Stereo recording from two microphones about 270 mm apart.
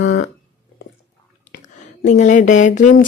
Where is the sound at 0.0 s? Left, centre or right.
Left.